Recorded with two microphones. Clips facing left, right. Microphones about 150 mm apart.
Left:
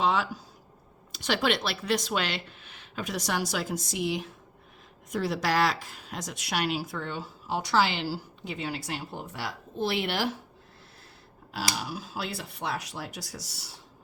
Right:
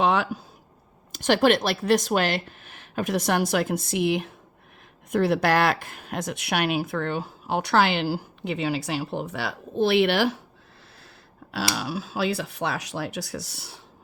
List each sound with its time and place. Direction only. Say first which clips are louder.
0.0 s a sound: right 4 dB; 60° right (ahead or behind)
1.1 s a woman's voice: right 8 dB; 45° right (ahead or behind); by 10.3 s 75° right (ahead or behind)
11.5 s speech: right 5 dB; 80° right; by 13.7 s 65° right (ahead or behind)